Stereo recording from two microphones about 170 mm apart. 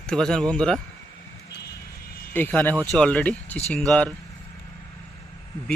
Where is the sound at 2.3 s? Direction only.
10° left (ahead or behind).